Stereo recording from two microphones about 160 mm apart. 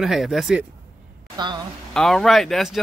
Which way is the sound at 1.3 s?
25° right (ahead or behind).